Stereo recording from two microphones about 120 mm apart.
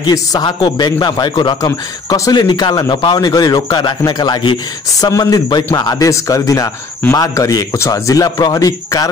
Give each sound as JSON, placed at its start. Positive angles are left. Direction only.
{"t": 0.0, "sound": "a man's voice", "side_deg": 35}